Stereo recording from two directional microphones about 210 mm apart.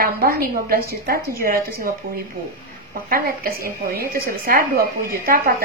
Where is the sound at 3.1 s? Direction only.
45° right (ahead or behind).